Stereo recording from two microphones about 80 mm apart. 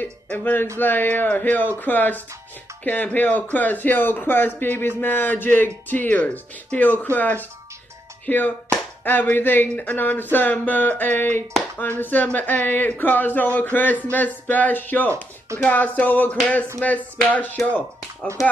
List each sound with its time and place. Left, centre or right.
0.0 s speech: left
18.4 s speech: left